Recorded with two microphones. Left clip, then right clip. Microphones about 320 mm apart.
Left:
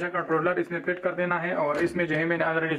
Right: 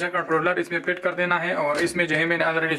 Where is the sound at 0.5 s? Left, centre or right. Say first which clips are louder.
Right 3 dB; centre.